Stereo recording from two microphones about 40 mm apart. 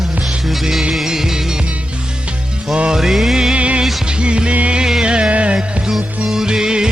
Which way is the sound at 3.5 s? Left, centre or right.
Right.